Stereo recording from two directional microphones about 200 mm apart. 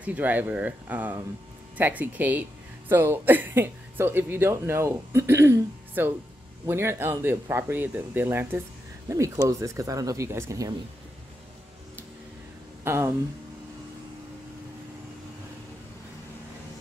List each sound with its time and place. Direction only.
0.0 s speech: 10° right (ahead or behind)
12.8 s speech: 10° right (ahead or behind)